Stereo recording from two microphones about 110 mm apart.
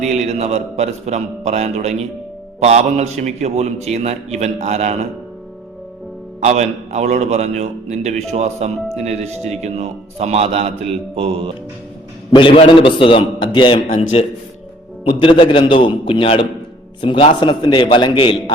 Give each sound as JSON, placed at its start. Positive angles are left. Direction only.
{"t": 0.0, "sound": "speech", "side_deg": -90}
{"t": 6.4, "sound": "a man's voice", "side_deg": -90}
{"t": 12.3, "sound": "a man's voice", "side_deg": 50}
{"t": 14.1, "sound": "speech", "side_deg": 70}
{"t": 15.0, "sound": "a man's voice", "side_deg": 55}